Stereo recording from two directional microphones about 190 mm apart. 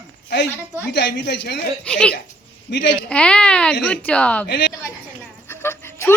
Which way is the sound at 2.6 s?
70° left (ahead or behind).